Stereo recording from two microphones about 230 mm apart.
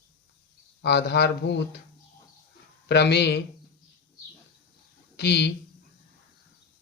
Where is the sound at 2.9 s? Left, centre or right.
Left.